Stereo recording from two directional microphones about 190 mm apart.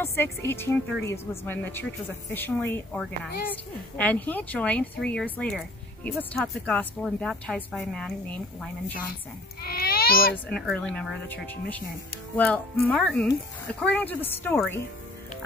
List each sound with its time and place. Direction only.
0.0 s a woman's voice: 15° left (ahead or behind)
9.6 s baby cry: 55° left (ahead or behind)
10.3 s a woman's voice: 5° left (ahead or behind)